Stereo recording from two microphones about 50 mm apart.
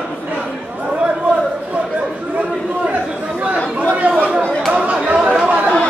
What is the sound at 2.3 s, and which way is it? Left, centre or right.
Chatter, right.